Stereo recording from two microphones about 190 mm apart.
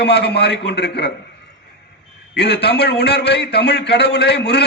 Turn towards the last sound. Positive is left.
turn(degrees=60)  # may be behind; listen again after turning